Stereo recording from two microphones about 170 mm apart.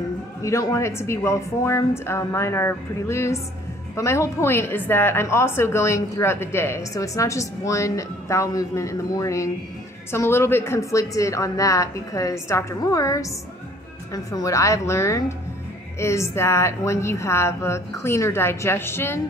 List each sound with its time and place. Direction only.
0.4 s a woman's voice: 20° left (ahead or behind)